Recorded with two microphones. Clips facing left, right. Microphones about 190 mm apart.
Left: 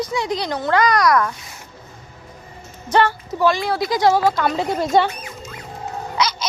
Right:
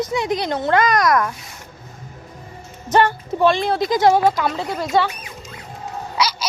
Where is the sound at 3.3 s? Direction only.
25° right (ahead or behind).